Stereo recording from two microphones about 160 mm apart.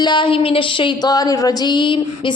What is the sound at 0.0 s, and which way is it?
A woman's voice, 30° left (ahead or behind).